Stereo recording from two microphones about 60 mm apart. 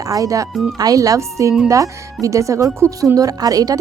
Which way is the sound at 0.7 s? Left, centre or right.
Right.